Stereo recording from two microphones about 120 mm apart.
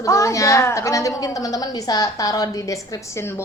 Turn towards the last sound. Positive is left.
turn(degrees=25)  # may be behind; listen again after turning